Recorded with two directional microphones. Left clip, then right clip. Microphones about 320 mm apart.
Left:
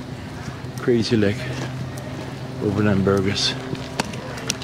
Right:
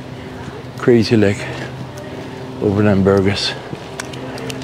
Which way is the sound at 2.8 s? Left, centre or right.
Centre.